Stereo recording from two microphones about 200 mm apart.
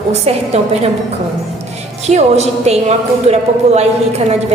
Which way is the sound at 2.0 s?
35° right (ahead or behind).